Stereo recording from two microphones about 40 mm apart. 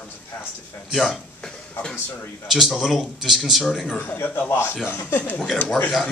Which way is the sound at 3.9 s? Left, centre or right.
Left.